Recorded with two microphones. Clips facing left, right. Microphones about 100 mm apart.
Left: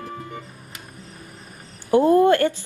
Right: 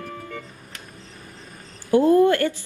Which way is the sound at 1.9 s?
20° left (ahead or behind).